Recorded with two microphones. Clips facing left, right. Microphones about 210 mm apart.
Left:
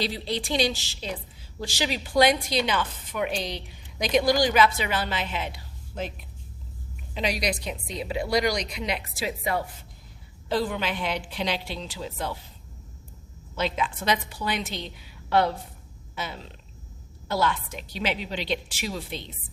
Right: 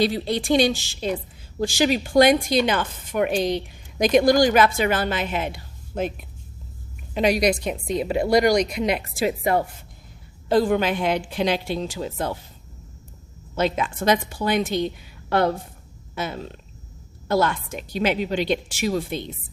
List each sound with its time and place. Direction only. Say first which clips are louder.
0.0 s a woman's voice: right 7 dB; 50° right (ahead or behind)
13.6 s a woman's voice: right 5 dB; 50° right (ahead or behind)